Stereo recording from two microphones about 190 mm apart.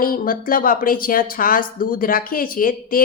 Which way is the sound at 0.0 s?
50° left (ahead or behind).